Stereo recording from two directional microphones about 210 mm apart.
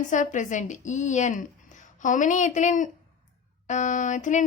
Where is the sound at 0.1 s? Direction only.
35° left (ahead or behind).